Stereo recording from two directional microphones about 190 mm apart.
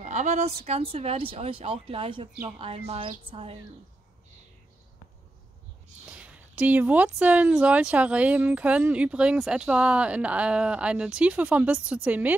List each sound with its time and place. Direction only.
0.0 s speech: 40° right (ahead or behind)
6.0 s speech: 5° right (ahead or behind)